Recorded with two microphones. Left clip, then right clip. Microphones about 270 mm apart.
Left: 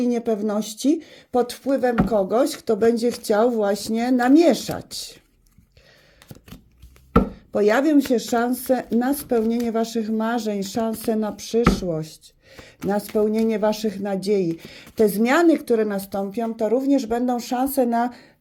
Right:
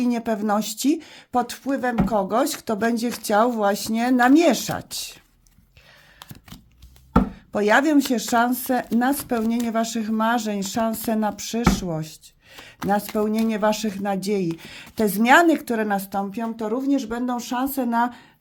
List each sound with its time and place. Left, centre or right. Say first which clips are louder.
0.0 s speech: left 2 dB; centre
7.5 s a woman's voice: even; centre